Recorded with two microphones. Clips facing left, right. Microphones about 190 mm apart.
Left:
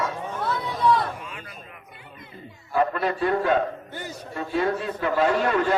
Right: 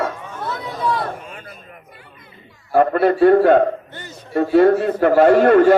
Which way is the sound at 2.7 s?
55° right (ahead or behind).